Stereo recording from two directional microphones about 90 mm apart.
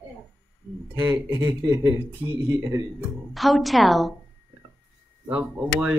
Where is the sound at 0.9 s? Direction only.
25° right (ahead or behind).